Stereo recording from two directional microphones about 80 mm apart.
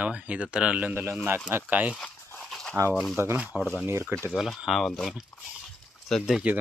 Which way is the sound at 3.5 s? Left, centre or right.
Centre.